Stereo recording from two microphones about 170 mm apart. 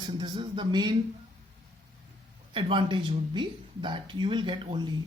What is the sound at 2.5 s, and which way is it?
Speech, 30° right (ahead or behind).